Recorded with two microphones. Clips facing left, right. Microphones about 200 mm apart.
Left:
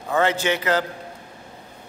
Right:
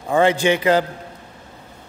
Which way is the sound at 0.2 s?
15° right (ahead or behind).